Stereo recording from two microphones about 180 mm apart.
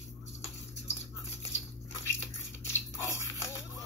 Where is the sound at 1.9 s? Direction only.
15° left (ahead or behind).